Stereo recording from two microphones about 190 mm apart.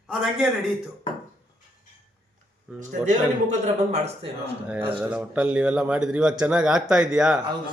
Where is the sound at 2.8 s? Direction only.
40° right (ahead or behind).